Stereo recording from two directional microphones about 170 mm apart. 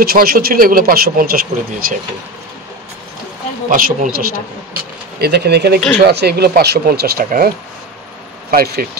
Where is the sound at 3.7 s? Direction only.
55° right (ahead or behind).